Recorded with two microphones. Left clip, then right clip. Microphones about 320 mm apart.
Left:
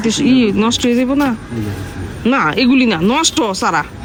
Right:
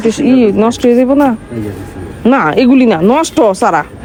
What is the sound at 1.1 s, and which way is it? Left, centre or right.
Speech, right.